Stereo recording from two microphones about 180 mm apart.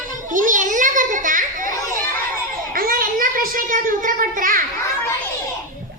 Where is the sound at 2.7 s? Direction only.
50° right (ahead or behind).